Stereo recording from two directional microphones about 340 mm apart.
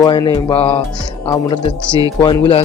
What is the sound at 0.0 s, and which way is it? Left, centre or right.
Speech, centre.